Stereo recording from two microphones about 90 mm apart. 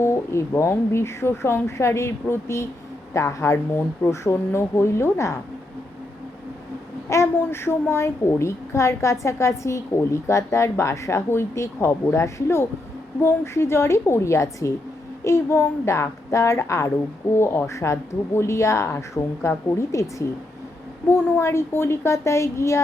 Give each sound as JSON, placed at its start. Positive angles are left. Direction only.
{"t": 0.0, "sound": "a woman's voice", "side_deg": 30}
{"t": 7.1, "sound": "a woman's voice", "side_deg": 30}